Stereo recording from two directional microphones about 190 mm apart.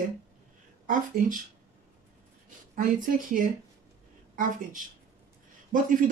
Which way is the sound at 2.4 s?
45° right (ahead or behind).